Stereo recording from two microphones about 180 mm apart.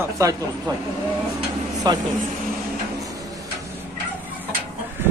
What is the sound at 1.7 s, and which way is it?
Vehicle, 20° right (ahead or behind).